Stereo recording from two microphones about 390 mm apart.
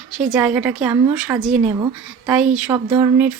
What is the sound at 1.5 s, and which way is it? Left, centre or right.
Speech, centre.